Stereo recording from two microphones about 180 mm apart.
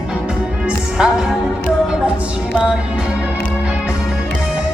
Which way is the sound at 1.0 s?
5° right (ahead or behind).